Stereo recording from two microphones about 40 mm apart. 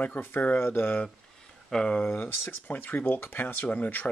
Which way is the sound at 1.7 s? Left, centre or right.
Centre.